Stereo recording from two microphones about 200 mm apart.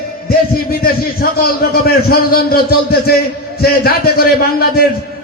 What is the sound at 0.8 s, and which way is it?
A man's voice, 50° left (ahead or behind).